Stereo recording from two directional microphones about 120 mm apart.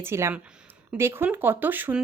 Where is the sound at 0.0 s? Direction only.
20° right (ahead or behind).